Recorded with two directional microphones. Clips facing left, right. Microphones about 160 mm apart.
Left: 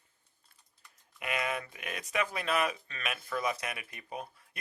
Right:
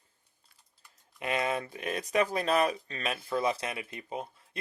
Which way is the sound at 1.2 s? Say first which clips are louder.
Right 4 dB; 30° right (ahead or behind).